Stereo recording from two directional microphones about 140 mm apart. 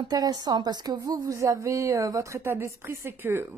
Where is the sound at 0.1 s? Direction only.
30° right (ahead or behind).